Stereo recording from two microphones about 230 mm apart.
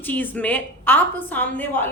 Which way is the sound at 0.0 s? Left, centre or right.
Centre.